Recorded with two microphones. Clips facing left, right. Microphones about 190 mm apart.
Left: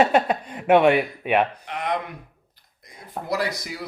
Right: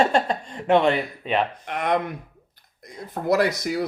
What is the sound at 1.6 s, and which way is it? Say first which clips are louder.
Speech: right 3 dB; 55° right (ahead or behind).